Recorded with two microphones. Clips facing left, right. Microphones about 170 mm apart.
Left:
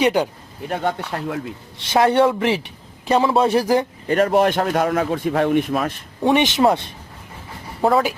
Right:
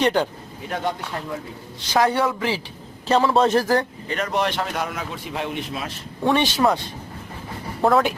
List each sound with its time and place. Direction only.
0.0 s speech: 10° left (ahead or behind)
0.7 s speech: 60° left (ahead or behind)
2.1 s speech: 25° left (ahead or behind)
3.1 s speech: 15° left (ahead or behind)
4.1 s a man's voice: 50° left (ahead or behind)
6.2 s speech: 20° left (ahead or behind)
7.8 s speech: 5° left (ahead or behind)